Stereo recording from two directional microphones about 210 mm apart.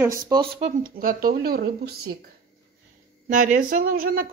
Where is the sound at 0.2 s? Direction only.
20° right (ahead or behind).